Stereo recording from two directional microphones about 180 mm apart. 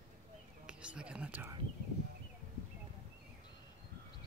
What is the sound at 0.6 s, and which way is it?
Speech, 5° right (ahead or behind).